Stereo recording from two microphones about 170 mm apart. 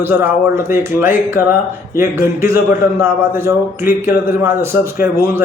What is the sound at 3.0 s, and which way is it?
A man's voice, 15° right (ahead or behind).